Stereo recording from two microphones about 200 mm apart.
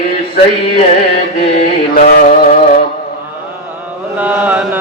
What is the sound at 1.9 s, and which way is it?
Mantra, 45° left (ahead or behind).